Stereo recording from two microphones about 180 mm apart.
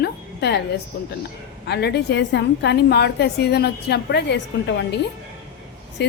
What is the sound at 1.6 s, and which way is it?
A woman's voice, 65° left (ahead or behind).